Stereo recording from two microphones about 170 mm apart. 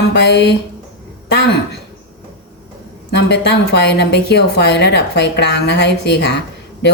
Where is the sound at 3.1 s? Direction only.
80° left.